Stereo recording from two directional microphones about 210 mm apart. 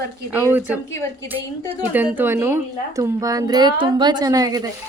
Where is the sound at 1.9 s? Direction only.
10° right (ahead or behind).